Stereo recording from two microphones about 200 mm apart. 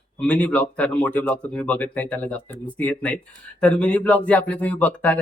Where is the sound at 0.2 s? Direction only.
5° left (ahead or behind).